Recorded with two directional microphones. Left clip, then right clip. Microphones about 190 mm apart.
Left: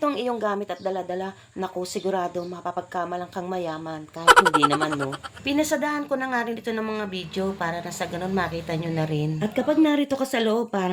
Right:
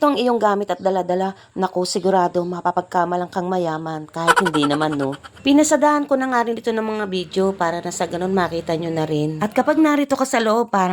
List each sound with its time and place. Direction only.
0.0 s speech: 40° right (ahead or behind)
4.3 s speech: centre (ahead or behind)
5.5 s speech: 35° right (ahead or behind)